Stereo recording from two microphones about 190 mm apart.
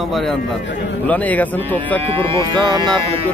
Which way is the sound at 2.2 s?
25° right (ahead or behind).